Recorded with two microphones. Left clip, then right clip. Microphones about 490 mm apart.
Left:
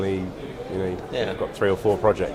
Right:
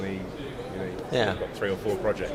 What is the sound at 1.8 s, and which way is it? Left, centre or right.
Speech, left.